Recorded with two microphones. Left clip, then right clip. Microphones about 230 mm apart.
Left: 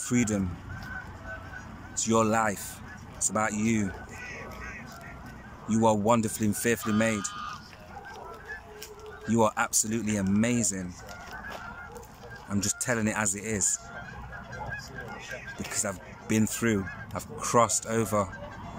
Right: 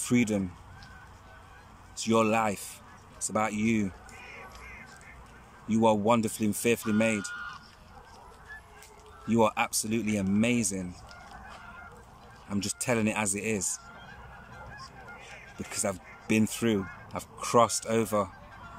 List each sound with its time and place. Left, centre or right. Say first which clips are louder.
0.0 s speech: right 1 dB; centre
2.0 s speech: left 1 dB; centre
5.7 s speech: even; centre
9.3 s speech: even; centre
12.4 s speech: left 1 dB; centre
15.7 s speech: right 2 dB; centre